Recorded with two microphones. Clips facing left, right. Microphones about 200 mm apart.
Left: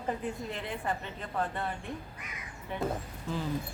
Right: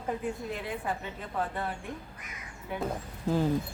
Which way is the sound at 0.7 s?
5° right (ahead or behind).